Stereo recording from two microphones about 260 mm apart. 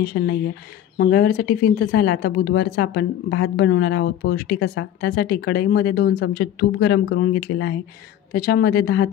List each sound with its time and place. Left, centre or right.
0.0 s a woman's voice: left